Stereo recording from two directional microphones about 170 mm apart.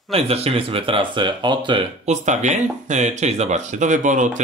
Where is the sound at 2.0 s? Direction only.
45° right (ahead or behind).